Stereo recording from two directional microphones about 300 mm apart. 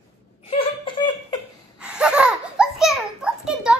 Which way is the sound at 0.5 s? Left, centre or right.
Centre.